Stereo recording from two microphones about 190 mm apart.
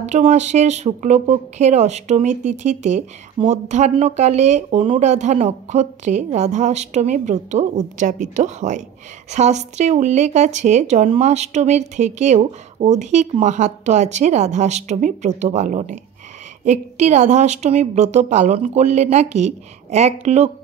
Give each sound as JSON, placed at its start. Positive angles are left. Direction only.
{"t": 0.0, "sound": "speech", "side_deg": -35}